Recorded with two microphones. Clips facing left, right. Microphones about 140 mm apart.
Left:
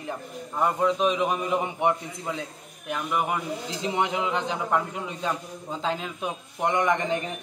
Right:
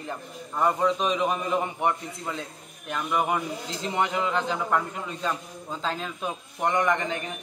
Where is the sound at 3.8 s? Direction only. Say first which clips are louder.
Even; 15° left (ahead or behind).